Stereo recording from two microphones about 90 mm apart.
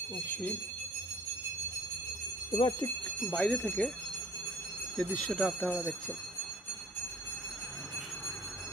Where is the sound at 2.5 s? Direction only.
80° left.